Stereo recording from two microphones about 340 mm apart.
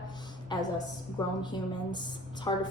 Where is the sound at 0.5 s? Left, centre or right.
Centre.